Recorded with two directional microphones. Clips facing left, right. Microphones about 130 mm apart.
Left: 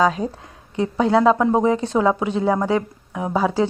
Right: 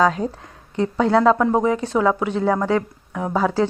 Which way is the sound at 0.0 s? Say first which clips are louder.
Even; 20° left (ahead or behind).